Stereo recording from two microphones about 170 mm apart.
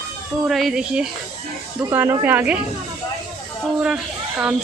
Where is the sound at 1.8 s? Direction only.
15° right (ahead or behind).